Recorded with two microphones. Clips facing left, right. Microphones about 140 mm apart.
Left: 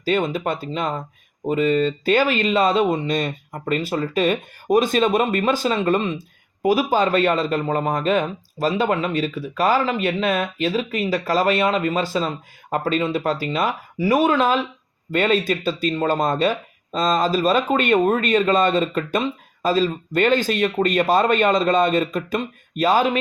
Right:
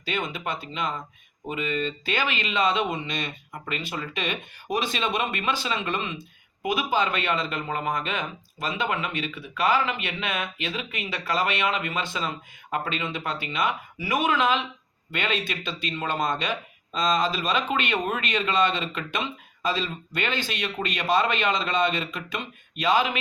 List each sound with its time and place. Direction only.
0.0 s speech: 40° left (ahead or behind)